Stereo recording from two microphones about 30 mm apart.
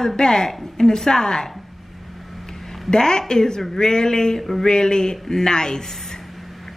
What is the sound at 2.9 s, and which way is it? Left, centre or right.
A woman's voice, left.